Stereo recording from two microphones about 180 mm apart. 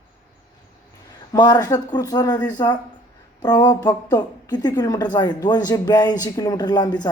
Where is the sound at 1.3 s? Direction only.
20° left (ahead or behind).